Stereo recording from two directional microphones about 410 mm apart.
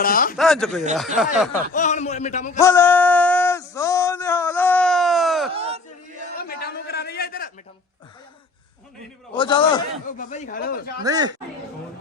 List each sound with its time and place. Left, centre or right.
0.0 s speech: left
0.3 s speech: centre
1.7 s a man's voice: centre
2.6 s male singing: centre
5.5 s a sound: centre
6.5 s a sound: left
9.3 s a man's voice: centre
11.0 s speech: centre